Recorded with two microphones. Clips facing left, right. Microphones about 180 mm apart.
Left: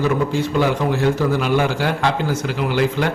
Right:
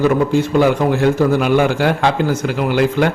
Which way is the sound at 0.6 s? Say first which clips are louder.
Right 4 dB; 50° right (ahead or behind).